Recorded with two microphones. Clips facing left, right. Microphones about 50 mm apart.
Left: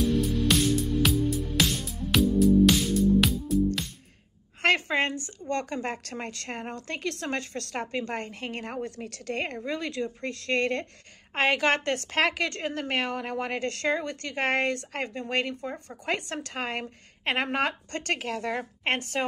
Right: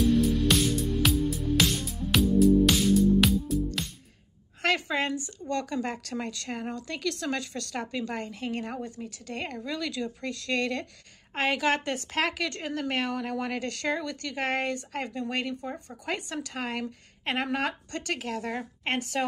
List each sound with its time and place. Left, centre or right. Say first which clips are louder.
0.0 s music: right 2 dB; centre
4.6 s a sound: left 3 dB; left
5.5 s a woman's voice: even; left
8.9 s a woman's voice: left 4 dB; left
9.7 s a woman's voice: left 1 dB; left
11.3 s a woman's voice: left 2 dB; left